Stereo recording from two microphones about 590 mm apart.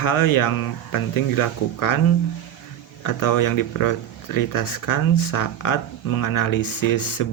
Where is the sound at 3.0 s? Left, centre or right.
Left.